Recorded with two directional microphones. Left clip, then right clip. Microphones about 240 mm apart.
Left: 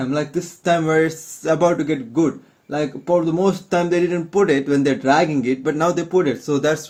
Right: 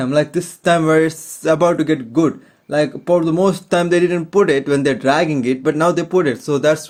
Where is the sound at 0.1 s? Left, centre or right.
Right.